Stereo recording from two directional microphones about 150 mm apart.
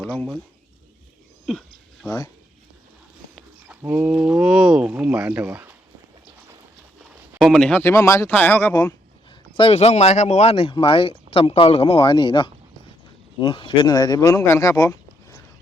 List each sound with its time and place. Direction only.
0.0 s speech: 5° left (ahead or behind)
1.5 s a sound: centre (ahead or behind)
3.3 s speech: 10° right (ahead or behind)
7.3 s speech: centre (ahead or behind); by 9.0 s 20° left (ahead or behind)
9.6 s speech: 40° left (ahead or behind); by 14.9 s 20° left (ahead or behind)